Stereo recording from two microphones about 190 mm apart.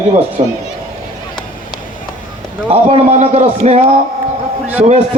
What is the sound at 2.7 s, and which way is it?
A man's voice, 30° right (ahead or behind).